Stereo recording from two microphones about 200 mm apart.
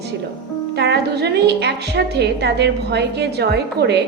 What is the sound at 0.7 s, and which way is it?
A woman's voice, 55° right (ahead or behind).